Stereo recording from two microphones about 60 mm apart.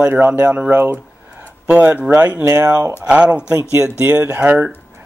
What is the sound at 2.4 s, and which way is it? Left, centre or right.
Speech, right.